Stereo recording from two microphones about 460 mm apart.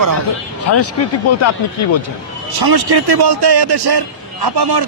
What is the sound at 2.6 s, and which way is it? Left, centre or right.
A man's voice, right.